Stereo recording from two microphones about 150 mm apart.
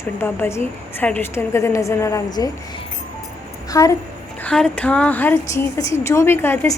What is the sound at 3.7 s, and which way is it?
Speech, 20° left (ahead or behind).